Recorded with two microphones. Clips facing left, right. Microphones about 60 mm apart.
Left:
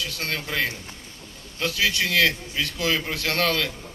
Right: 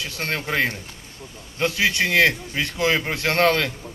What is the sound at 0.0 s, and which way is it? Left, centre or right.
A man's voice, right.